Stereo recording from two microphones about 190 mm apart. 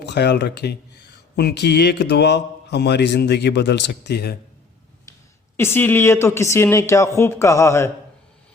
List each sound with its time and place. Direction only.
0.0 s speech: 60° left (ahead or behind)
5.5 s speech: 10° left (ahead or behind)